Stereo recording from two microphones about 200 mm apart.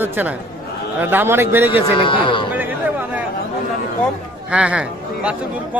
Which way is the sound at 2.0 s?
25° left (ahead or behind).